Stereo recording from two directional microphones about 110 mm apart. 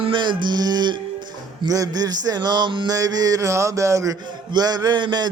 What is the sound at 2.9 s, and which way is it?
Speech, 35° right (ahead or behind).